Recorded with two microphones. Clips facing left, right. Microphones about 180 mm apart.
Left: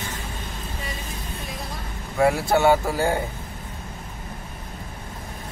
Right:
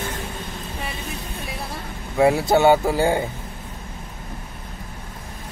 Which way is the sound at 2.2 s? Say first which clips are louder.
Right 3 dB; 20° right (ahead or behind).